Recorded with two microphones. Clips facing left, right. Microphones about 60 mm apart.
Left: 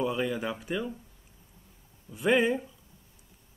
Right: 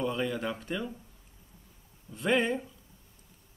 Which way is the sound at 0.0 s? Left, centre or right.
Centre.